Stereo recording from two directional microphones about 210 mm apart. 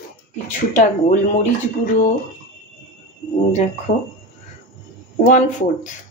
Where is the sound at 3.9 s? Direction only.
30° left (ahead or behind).